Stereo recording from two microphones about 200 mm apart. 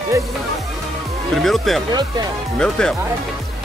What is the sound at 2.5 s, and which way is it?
Speech, 5° left (ahead or behind).